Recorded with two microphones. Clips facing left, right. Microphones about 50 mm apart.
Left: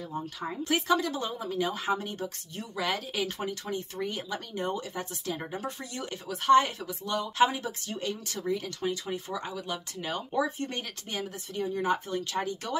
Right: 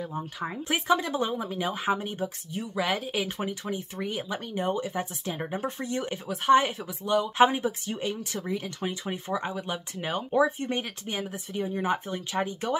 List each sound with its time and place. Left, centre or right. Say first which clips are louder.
0.1 s speech: right 2 dB; right
7.4 s speech: right 1 dB; right
7.8 s speech: right 3 dB; centre